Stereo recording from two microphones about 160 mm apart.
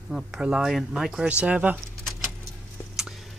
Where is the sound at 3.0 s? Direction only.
Centre (ahead or behind).